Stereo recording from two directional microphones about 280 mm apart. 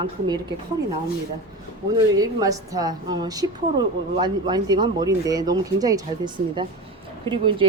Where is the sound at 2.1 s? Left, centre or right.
Centre.